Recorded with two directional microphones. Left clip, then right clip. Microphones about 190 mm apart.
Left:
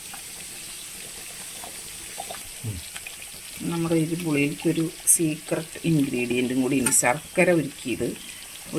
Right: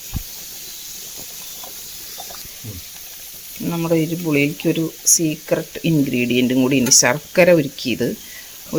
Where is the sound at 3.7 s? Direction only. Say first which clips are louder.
Right 6 dB; 45° right (ahead or behind).